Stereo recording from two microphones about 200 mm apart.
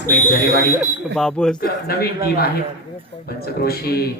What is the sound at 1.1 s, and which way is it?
Speech, 5° left (ahead or behind).